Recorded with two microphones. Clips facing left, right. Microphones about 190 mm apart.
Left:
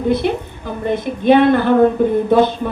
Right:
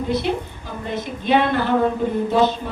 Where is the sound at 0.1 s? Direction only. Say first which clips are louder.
Left 5 dB; 55° left (ahead or behind).